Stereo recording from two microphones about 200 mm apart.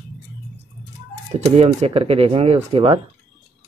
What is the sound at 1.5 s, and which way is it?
Speech, 30° right (ahead or behind).